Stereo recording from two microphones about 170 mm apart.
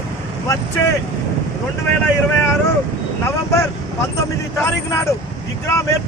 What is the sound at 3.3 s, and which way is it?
Speech, 15° left (ahead or behind).